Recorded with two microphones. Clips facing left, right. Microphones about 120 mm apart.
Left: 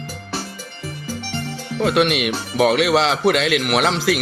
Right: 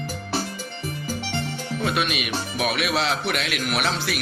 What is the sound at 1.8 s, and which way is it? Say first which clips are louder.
Speech: left 9 dB; 75° left (ahead or behind).